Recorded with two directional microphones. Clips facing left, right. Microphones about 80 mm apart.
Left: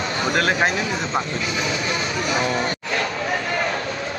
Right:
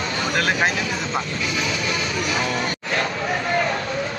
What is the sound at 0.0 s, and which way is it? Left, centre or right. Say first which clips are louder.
Speech: left 2 dB; left.